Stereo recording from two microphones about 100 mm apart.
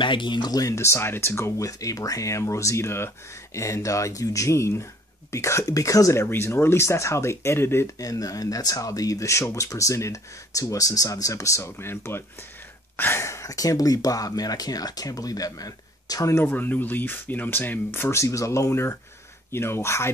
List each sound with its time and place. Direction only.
0.0 s speech: 55° left (ahead or behind); by 7.9 s 25° left (ahead or behind)
8.0 s speech: 35° left (ahead or behind)
16.3 s speech: 20° left (ahead or behind)